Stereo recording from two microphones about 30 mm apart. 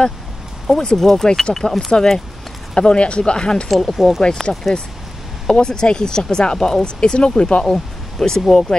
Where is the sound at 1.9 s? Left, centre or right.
Left.